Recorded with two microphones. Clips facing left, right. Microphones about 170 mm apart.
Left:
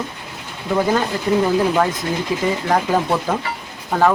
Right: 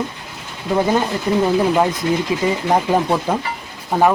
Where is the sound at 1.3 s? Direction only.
20° right (ahead or behind).